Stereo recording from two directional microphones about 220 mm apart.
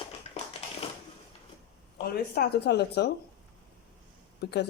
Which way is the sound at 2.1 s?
45° left (ahead or behind).